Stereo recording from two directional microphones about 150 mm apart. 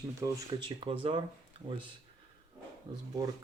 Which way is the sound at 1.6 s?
40° right (ahead or behind).